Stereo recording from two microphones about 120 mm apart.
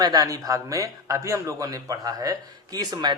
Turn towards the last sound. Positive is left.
turn(degrees=-35)  # may be behind; listen again after turning